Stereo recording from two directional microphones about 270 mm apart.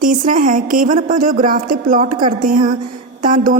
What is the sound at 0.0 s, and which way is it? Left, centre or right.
A woman's voice, right.